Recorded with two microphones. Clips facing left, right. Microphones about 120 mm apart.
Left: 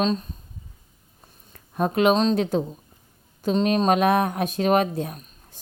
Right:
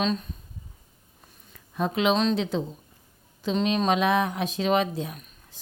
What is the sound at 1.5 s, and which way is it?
Speech, 50° left (ahead or behind).